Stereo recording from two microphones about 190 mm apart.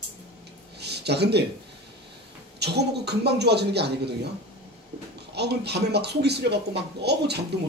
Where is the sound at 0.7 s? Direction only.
60° right (ahead or behind).